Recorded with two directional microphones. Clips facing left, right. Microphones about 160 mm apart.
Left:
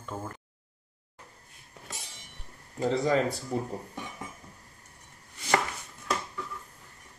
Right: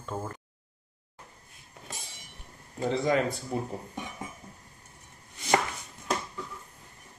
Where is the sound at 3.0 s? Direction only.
35° left (ahead or behind).